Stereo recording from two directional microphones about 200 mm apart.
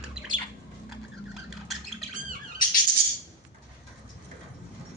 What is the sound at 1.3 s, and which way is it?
Squawk, centre (ahead or behind).